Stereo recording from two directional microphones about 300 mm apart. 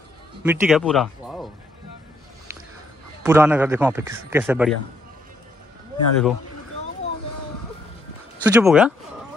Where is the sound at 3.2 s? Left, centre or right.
Centre.